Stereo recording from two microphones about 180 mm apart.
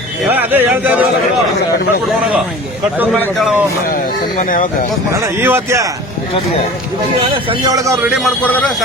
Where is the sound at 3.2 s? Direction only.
10° left (ahead or behind).